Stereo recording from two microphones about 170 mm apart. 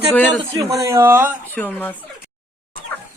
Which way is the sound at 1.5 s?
10° left (ahead or behind).